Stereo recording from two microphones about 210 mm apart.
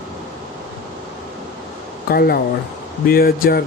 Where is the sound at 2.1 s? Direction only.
45° left (ahead or behind).